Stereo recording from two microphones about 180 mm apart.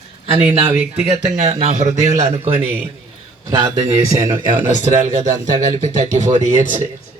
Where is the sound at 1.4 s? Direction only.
40° right (ahead or behind).